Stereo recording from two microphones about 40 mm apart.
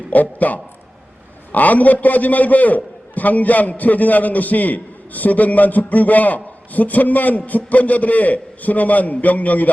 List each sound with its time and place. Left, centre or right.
0.1 s a man's voice: left